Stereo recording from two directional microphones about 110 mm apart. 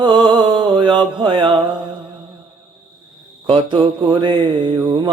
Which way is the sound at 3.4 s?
50° right (ahead or behind).